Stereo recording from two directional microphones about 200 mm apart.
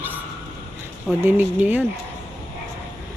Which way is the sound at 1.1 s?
10° right (ahead or behind).